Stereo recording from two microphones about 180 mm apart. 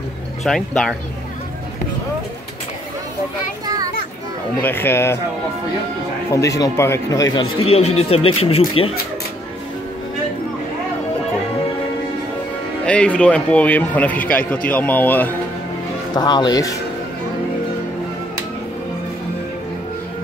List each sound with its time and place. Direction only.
0.4 s speech: centre (ahead or behind)
3.6 s children playing: 20° right (ahead or behind)
4.6 s a man's voice: 10° left (ahead or behind)
6.3 s a man's voice: 20° left (ahead or behind)
12.8 s a man's voice: 5° left (ahead or behind)
16.2 s speech: 25° left (ahead or behind)